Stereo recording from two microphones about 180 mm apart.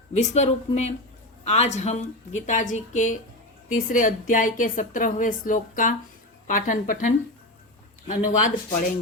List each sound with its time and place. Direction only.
0.2 s speech: 40° left (ahead or behind)